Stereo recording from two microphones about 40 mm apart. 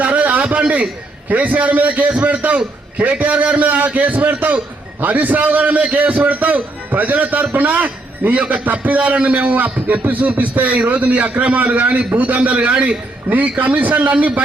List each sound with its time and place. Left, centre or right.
0.0 s a sound: right
1.3 s a man's voice: right
8.6 s a man's voice: right
9.8 s a man's voice: right
13.3 s a man's voice: right